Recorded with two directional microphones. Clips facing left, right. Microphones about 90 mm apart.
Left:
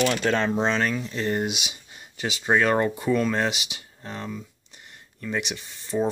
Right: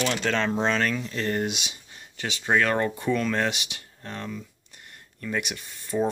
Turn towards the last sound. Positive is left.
turn(degrees=0)  # may be behind; listen again after turning